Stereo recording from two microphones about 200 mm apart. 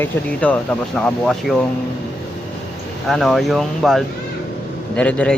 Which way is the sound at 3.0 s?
Centre (ahead or behind).